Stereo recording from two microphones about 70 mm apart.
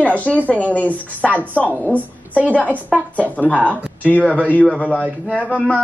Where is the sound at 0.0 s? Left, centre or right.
Left.